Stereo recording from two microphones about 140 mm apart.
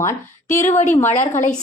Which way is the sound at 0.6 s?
60° left (ahead or behind).